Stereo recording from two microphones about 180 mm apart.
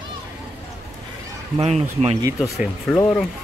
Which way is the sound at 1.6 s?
35° right (ahead or behind).